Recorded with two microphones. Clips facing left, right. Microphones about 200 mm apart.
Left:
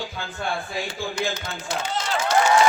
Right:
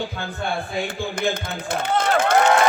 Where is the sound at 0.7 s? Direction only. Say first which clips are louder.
Right 3 dB; 60° right (ahead or behind).